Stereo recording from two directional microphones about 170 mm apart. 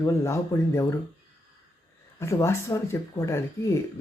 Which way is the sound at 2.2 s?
15° left (ahead or behind).